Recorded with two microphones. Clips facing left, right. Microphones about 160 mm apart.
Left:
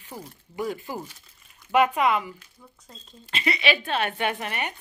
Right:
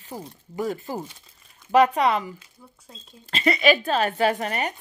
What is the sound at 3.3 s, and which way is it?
Speech, 40° right (ahead or behind).